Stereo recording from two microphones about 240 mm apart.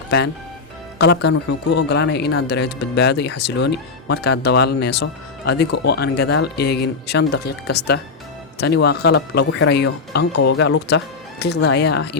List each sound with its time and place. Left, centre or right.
0.9 s speech: left